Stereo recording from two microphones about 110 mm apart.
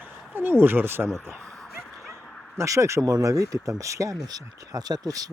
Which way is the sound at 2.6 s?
25° right (ahead or behind).